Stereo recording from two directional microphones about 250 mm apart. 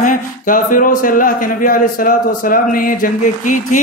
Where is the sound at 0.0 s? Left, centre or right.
Left.